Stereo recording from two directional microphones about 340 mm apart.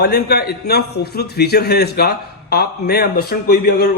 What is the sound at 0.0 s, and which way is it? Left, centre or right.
A man's voice, left.